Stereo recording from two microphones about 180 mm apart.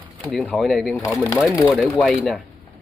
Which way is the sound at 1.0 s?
15° left (ahead or behind).